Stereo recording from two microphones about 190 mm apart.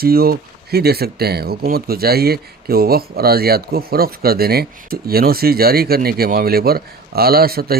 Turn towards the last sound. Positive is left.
turn(degrees=-50)  # may be behind; listen again after turning